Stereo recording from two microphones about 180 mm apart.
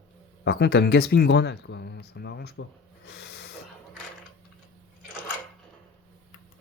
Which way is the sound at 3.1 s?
65° left (ahead or behind).